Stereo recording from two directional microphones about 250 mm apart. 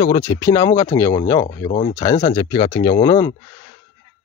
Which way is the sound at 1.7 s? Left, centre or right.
Left.